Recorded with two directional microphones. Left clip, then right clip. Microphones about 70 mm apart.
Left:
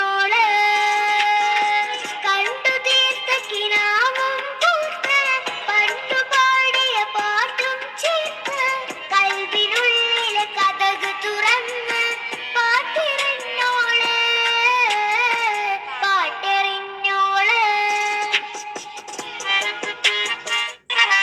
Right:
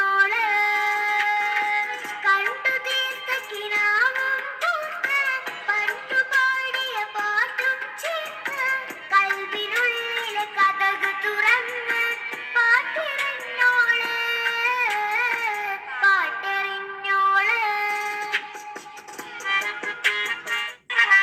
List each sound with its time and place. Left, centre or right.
0.0 s music: left
19.5 s music: left